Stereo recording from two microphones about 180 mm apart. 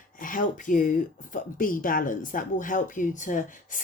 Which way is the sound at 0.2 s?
50° left (ahead or behind).